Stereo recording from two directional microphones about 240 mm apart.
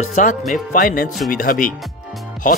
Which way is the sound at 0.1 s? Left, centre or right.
Left.